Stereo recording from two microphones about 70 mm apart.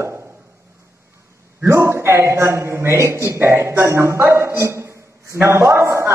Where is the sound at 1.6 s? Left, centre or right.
Right.